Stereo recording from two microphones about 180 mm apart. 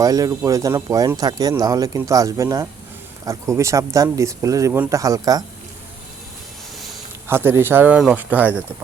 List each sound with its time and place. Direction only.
0.0 s speech: 20° right (ahead or behind)
6.7 s a sound: centre (ahead or behind)
7.3 s speech: 15° right (ahead or behind)